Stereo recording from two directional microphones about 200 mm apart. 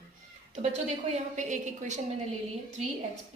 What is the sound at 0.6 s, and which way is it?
A woman's voice, 35° right (ahead or behind).